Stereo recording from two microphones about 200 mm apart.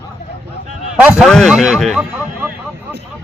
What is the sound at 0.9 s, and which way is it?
Speech, 5° right (ahead or behind).